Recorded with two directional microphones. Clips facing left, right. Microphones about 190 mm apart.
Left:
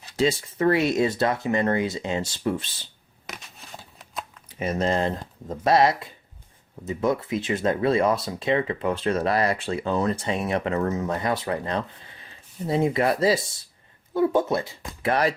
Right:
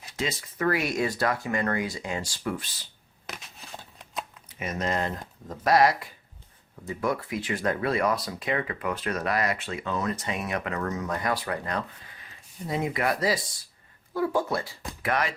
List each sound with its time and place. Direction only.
0.2 s speech: 30° left (ahead or behind)
3.2 s a sound: centre (ahead or behind)
4.4 s speech: 30° left (ahead or behind)
15.0 s speech: 35° left (ahead or behind)